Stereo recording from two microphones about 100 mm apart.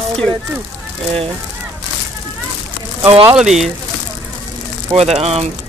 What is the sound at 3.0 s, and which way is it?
Speech, 65° right (ahead or behind).